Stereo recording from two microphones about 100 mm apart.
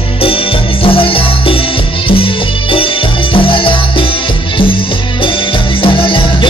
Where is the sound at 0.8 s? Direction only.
65° left (ahead or behind).